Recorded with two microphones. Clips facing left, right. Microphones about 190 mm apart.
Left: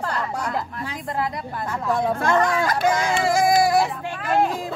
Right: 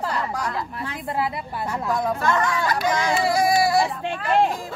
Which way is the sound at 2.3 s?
50° left (ahead or behind).